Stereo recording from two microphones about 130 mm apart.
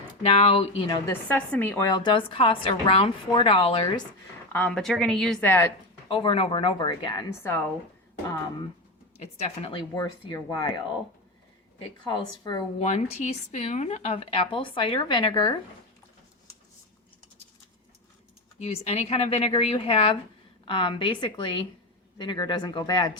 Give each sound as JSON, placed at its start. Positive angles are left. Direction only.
{"t": 0.2, "sound": "speech", "side_deg": 55}
{"t": 1.1, "sound": "a woman's voice", "side_deg": 15}
{"t": 1.8, "sound": "a woman's voice", "side_deg": 35}
{"t": 3.2, "sound": "speech", "side_deg": 40}
{"t": 4.5, "sound": "a woman's voice", "side_deg": 10}
{"t": 6.1, "sound": "a woman's voice", "side_deg": 40}
{"t": 9.1, "sound": "speech", "side_deg": 55}
{"t": 9.7, "sound": "a woman's voice", "side_deg": 35}
{"t": 11.8, "sound": "a woman's voice", "side_deg": 35}
{"t": 12.8, "sound": "a woman's voice", "side_deg": 60}
{"t": 18.6, "sound": "a woman's voice", "side_deg": 55}